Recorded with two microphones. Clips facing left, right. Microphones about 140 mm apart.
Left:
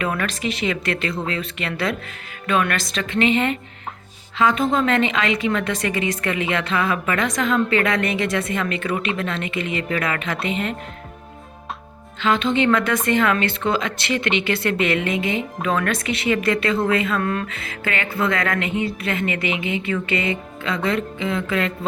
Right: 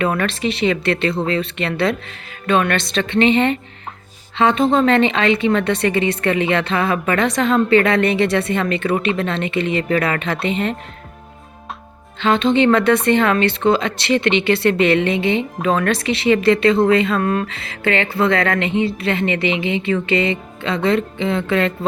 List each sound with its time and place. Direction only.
0.3 s a woman's voice: 30° right (ahead or behind)
12.2 s a woman's voice: 25° right (ahead or behind)